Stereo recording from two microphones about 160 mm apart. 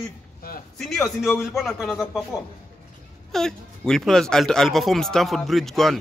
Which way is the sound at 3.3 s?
5° left (ahead or behind).